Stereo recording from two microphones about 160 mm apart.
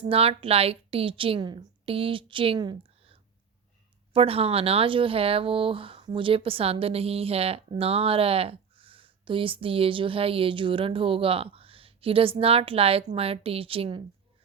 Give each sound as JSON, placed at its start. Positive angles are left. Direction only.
{"t": 0.1, "sound": "speech", "side_deg": -35}